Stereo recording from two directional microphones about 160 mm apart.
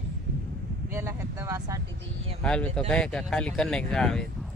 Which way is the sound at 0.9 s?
15° right (ahead or behind).